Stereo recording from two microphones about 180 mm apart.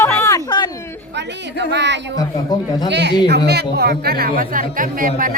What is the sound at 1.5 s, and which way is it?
A woman's voice, 75° right (ahead or behind).